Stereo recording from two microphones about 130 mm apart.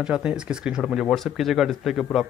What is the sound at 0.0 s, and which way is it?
Speech, 10° right (ahead or behind).